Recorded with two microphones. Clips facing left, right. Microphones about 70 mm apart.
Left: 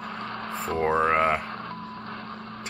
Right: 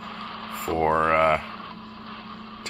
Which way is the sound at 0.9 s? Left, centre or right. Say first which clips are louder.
Right 2 dB; centre.